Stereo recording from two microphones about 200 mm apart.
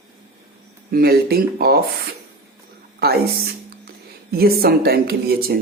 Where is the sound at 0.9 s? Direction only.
50° right (ahead or behind).